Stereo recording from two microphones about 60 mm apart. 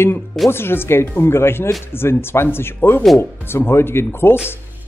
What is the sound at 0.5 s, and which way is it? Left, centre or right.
Speech, left.